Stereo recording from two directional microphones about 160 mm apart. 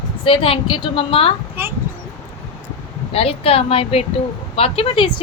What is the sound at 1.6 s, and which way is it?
Speech, 15° right (ahead or behind).